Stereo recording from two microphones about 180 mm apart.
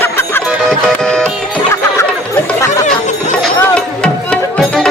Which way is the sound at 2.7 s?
45° left (ahead or behind).